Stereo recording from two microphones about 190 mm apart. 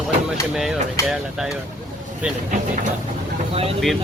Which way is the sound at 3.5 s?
30° right (ahead or behind).